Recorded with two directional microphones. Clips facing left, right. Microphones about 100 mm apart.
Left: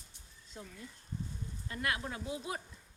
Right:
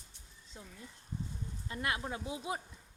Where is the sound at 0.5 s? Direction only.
20° right (ahead or behind).